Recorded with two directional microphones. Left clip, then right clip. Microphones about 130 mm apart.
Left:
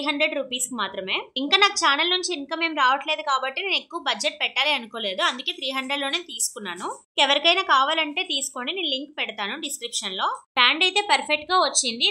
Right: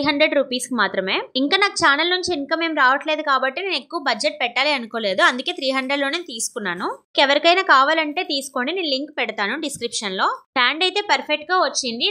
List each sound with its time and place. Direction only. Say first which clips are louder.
0.0 s a woman's voice: right 6 dB; 40° right (ahead or behind)
10.9 s a woman's voice: right 1 dB; 25° right (ahead or behind)